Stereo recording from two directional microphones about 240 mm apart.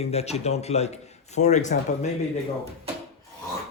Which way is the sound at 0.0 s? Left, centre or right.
Left.